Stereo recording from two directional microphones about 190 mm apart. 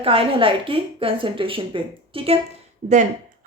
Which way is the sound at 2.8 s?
45° right (ahead or behind).